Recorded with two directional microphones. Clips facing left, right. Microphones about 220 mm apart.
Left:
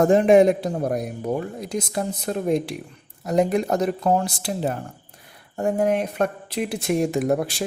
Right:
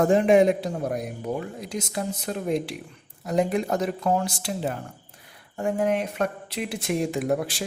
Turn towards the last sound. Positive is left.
turn(degrees=45)  # may be behind; listen again after turning